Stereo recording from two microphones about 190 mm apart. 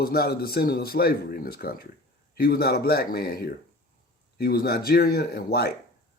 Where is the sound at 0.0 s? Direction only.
55° left (ahead or behind).